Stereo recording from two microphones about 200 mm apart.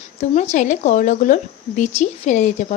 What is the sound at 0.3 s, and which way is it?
A woman's voice, 35° left (ahead or behind).